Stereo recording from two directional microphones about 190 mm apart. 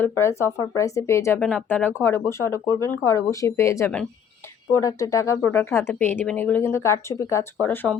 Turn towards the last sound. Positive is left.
turn(degrees=10)  # may be behind; listen again after turning